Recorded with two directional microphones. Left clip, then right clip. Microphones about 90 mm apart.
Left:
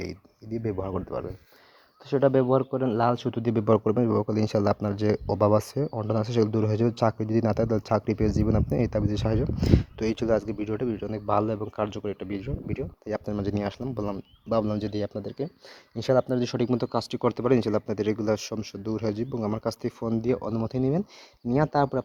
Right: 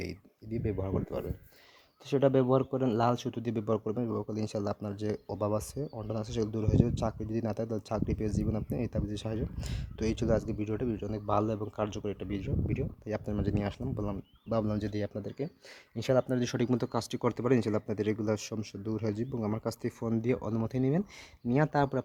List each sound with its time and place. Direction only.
0.5 s speech: 15° right (ahead or behind)
2.2 s speech: 5° left (ahead or behind)
3.6 s speech: 50° left (ahead or behind); by 13.2 s 25° left (ahead or behind)
13.2 s speech: 45° left (ahead or behind); by 14.6 s 75° left (ahead or behind)
14.6 s speech: 40° left (ahead or behind)
16.4 s speech: 25° left (ahead or behind); by 19.3 s 55° left (ahead or behind)
19.3 s speech: 40° left (ahead or behind)
20.0 s speech: 25° left (ahead or behind)